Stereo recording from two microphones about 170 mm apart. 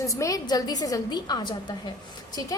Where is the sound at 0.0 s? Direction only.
20° left (ahead or behind).